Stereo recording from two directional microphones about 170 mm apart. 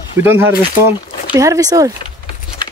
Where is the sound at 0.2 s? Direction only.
10° right (ahead or behind).